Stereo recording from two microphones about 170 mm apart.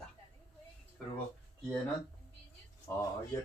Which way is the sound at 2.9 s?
20° left (ahead or behind).